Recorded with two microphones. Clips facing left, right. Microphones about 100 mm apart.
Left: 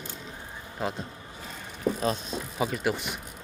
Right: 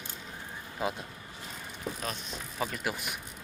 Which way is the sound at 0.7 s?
5° right (ahead or behind).